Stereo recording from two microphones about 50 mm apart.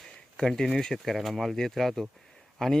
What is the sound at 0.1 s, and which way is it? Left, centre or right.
Speech, centre.